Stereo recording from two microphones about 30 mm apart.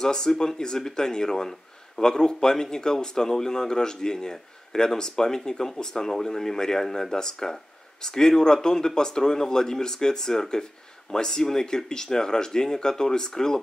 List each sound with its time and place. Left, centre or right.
0.0 s speech: left